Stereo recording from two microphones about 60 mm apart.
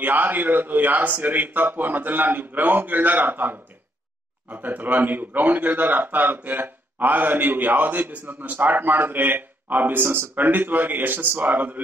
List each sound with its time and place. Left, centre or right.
0.0 s a man's voice: right